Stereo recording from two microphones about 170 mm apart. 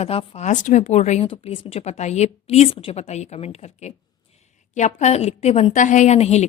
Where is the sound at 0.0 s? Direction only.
35° left (ahead or behind).